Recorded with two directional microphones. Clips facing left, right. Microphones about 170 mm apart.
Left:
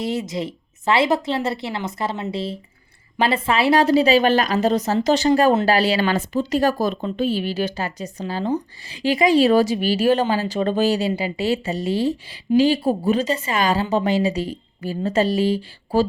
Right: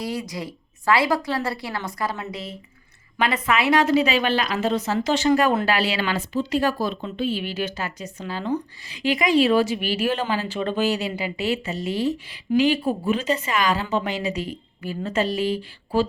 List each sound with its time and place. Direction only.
0.0 s a woman's voice: 25° left (ahead or behind)